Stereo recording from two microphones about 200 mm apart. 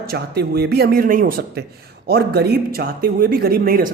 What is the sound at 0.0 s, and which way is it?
A man's voice, 50° right (ahead or behind).